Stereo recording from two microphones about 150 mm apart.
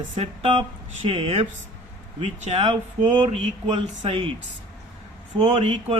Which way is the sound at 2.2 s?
50° right (ahead or behind).